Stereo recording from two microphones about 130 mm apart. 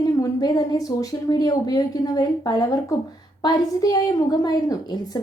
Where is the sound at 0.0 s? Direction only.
30° left (ahead or behind).